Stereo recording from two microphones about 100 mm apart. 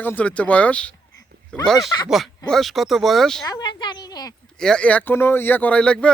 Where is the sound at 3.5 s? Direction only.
45° left (ahead or behind).